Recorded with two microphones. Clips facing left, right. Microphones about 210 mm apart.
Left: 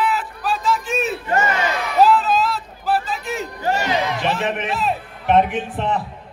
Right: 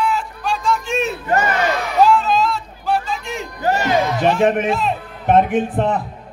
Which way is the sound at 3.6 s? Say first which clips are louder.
Right 4 dB; 45° right (ahead or behind).